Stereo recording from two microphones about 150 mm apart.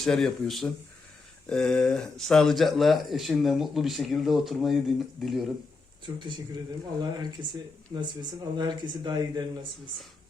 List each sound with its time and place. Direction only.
0.0 s speech: 5° left (ahead or behind)
6.1 s speech: 30° right (ahead or behind)